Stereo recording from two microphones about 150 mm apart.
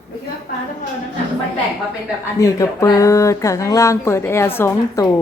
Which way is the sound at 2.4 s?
20° left (ahead or behind).